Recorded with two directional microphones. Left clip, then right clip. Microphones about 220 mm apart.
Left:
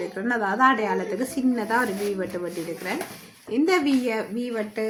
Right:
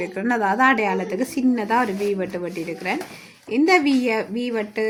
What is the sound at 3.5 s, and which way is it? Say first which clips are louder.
A woman's voice: right 4 dB; 35° right (ahead or behind).